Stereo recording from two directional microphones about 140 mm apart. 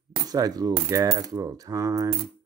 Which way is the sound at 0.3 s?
25° right (ahead or behind).